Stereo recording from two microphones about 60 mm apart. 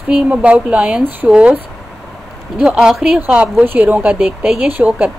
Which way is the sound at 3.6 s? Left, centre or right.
Right.